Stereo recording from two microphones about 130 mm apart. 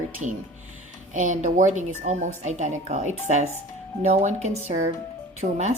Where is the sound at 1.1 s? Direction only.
75° right (ahead or behind).